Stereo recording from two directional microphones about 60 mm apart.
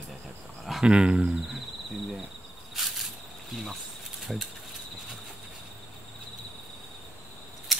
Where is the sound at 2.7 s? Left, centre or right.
Centre.